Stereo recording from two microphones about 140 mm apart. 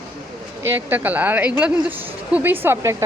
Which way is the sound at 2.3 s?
15° right (ahead or behind).